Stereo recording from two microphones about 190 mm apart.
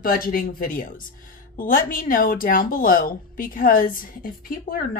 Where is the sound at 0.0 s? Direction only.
50° left (ahead or behind).